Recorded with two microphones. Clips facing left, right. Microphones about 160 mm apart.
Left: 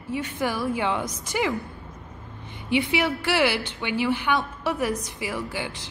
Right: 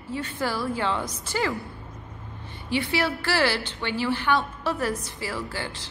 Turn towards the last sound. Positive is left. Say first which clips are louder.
# left 2 dB
turn(degrees=15)  # may be behind; listen again after turning